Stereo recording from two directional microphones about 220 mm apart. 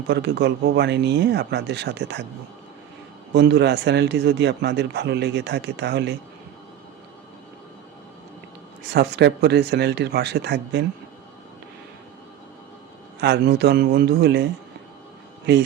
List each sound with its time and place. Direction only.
0.1 s speech: 50° right (ahead or behind)
3.3 s speech: 50° right (ahead or behind)
8.9 s speech: 50° right (ahead or behind)
13.1 s speech: 50° right (ahead or behind)